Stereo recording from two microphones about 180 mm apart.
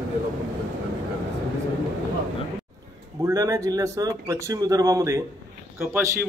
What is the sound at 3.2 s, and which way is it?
A man's voice, 20° right (ahead or behind).